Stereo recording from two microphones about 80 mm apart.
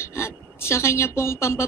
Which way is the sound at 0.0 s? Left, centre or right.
Left.